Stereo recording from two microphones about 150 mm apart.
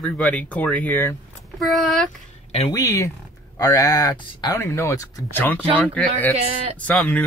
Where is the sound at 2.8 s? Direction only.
20° left (ahead or behind).